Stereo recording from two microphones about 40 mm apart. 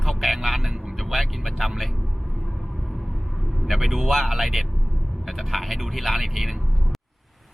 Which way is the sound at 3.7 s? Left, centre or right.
Centre.